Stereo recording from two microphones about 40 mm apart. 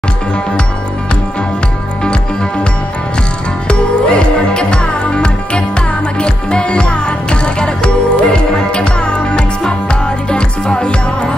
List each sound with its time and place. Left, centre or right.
3.6 s music: left